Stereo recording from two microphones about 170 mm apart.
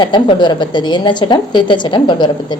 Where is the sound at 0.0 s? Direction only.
25° left (ahead or behind).